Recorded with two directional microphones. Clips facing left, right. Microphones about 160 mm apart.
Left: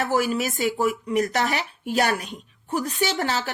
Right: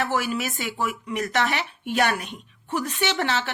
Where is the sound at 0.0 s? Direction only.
40° left (ahead or behind).